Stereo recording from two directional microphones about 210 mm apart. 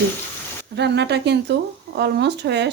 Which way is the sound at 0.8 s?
55° right (ahead or behind).